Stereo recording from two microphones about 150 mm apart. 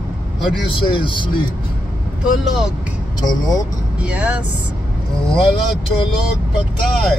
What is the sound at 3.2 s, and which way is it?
Speech, 25° left (ahead or behind).